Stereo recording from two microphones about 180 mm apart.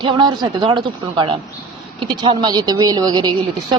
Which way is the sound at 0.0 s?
25° right (ahead or behind).